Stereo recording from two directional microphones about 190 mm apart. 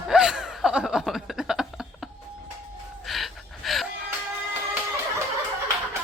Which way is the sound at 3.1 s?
Centre (ahead or behind).